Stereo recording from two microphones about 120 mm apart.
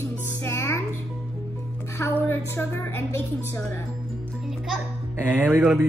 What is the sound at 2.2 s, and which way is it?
A woman's voice, 20° left (ahead or behind).